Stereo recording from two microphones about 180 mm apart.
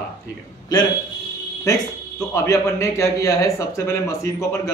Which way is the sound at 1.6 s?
15° left (ahead or behind).